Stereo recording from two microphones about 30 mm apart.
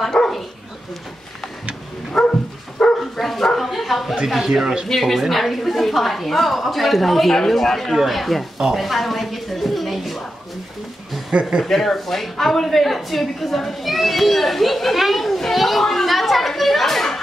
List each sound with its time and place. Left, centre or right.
0.2 s dog: centre
2.2 s a woman's voice: centre
3.0 s dog: centre
3.5 s bow-wow: centre
4.4 s speech: centre
4.8 s a woman's voice: centre
7.9 s a woman's voice: centre
8.7 s a sound: centre
11.6 s a woman's voice: centre
15.8 s speech: centre
16.1 s a sound: centre